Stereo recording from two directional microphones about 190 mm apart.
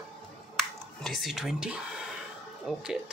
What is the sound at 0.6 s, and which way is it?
Speech, centre (ahead or behind).